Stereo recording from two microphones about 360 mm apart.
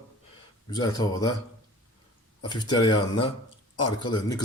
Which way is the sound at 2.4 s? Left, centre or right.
Centre.